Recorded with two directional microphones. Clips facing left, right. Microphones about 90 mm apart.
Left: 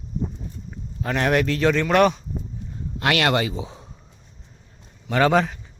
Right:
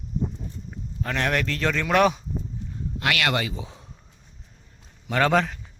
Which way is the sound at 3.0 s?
30° left (ahead or behind).